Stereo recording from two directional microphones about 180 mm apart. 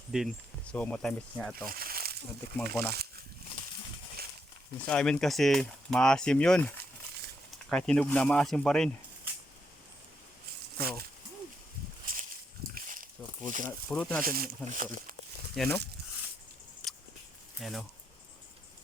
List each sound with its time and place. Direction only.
0.1 s speech: 5° right (ahead or behind)
0.7 s speech: 5° left (ahead or behind)
1.6 s a sound: 55° right (ahead or behind)
2.6 s speech: 60° right (ahead or behind)
4.9 s speech: 5° left (ahead or behind)
12.7 s a sound: 50° right (ahead or behind)
13.7 s speech: 10° left (ahead or behind)
14.2 s speech: 55° right (ahead or behind)
15.5 s speech: 5° left (ahead or behind)
17.6 s speech: centre (ahead or behind)